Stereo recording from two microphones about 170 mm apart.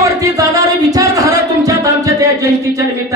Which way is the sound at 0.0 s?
20° right (ahead or behind).